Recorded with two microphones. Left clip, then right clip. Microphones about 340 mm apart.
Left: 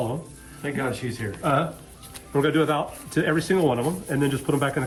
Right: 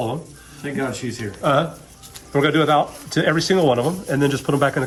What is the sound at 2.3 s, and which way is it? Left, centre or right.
Speech, right.